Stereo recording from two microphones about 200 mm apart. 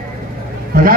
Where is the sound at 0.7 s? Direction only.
45° right (ahead or behind).